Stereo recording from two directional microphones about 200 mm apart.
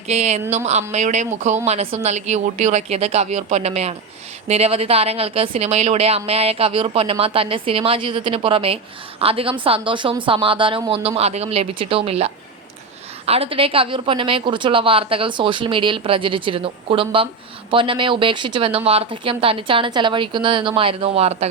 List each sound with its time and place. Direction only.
0.1 s a woman's voice: 35° right (ahead or behind)